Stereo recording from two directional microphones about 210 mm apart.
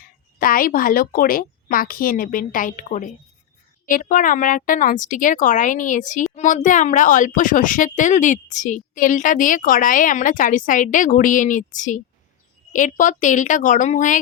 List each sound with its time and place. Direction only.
0.3 s a woman's voice: 45° left (ahead or behind)